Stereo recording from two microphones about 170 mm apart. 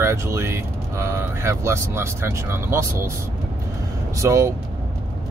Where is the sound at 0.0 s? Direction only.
15° right (ahead or behind).